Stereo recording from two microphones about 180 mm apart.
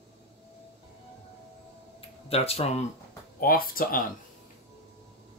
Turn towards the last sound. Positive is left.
turn(degrees=55)  # may be behind; listen again after turning